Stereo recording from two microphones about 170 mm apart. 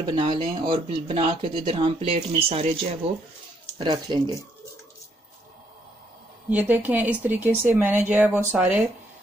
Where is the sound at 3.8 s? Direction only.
25° right (ahead or behind).